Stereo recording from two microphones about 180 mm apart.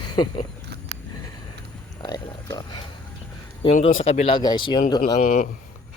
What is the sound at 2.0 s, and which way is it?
Speech, 20° left (ahead or behind).